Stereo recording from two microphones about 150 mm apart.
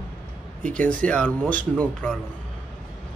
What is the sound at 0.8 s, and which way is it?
Speech, 10° left (ahead or behind).